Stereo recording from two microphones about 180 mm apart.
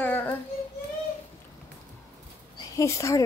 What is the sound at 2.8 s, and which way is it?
Speech, 15° left (ahead or behind).